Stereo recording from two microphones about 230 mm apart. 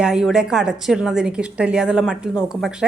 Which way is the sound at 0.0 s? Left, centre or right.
Centre.